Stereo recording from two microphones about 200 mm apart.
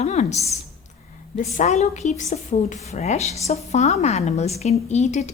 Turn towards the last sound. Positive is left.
turn(degrees=35)  # may be behind; listen again after turning